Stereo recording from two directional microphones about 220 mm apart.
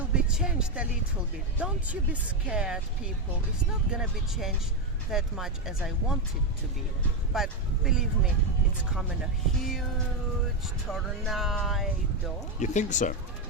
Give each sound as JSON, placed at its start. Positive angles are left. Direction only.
{"t": 0.0, "sound": "a sound", "side_deg": -5}
{"t": 1.5, "sound": "speech", "side_deg": -5}
{"t": 3.9, "sound": "speech", "side_deg": 0}
{"t": 7.3, "sound": "speech", "side_deg": 0}
{"t": 9.6, "sound": "speech", "side_deg": 0}
{"t": 12.5, "sound": "speech", "side_deg": 35}